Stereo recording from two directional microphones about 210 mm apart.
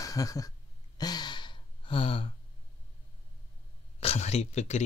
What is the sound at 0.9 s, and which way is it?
Gasp, 20° left (ahead or behind).